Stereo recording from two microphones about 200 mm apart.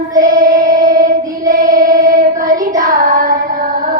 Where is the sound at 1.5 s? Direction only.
40° right (ahead or behind).